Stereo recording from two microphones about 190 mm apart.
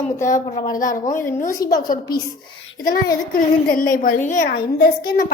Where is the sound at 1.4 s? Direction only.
20° left (ahead or behind).